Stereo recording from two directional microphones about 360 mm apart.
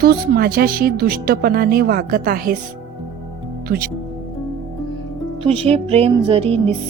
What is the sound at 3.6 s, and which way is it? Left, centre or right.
Speech, right.